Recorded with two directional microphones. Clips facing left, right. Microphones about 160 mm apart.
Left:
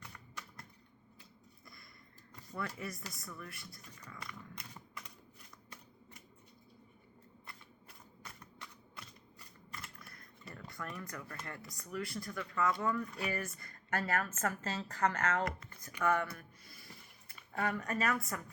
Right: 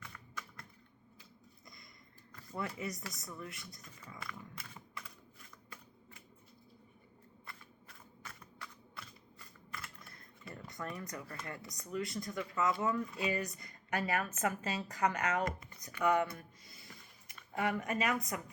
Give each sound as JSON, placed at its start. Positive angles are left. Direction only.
{"t": 0.1, "sound": "typing", "side_deg": 20}
{"t": 1.6, "sound": "a sound", "side_deg": -20}
{"t": 2.6, "sound": "speech", "side_deg": -20}
{"t": 10.5, "sound": "speech", "side_deg": -20}